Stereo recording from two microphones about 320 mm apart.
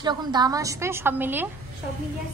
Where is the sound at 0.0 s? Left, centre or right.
Centre.